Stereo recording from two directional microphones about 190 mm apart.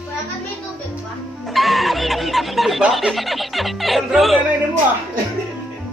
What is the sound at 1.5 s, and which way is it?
Snicker, centre (ahead or behind).